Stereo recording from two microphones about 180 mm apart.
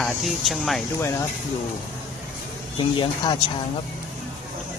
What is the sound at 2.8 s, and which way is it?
Speech, 25° left (ahead or behind).